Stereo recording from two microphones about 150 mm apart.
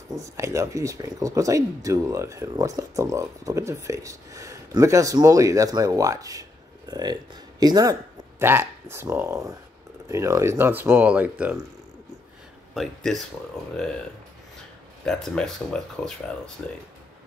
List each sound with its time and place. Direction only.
0.1 s speech: 20° right (ahead or behind)
12.7 s speech: centre (ahead or behind)
15.0 s speech: 5° left (ahead or behind)